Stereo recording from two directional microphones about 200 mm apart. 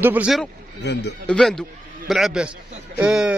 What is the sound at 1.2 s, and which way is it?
A man's voice, 5° left (ahead or behind).